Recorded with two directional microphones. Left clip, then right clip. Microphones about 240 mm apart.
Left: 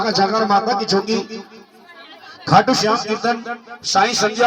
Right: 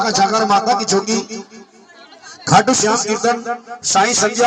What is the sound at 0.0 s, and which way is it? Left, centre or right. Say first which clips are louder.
A man's voice: right 2 dB; right.